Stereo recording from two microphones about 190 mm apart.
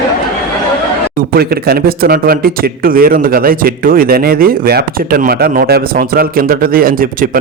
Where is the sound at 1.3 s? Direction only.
55° right (ahead or behind).